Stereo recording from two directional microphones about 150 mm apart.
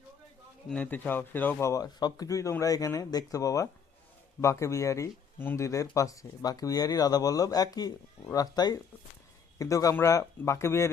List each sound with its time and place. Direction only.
0.7 s speech: 10° left (ahead or behind)